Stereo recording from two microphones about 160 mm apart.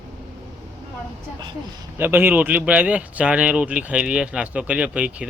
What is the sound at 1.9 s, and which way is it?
A man's voice, 15° right (ahead or behind).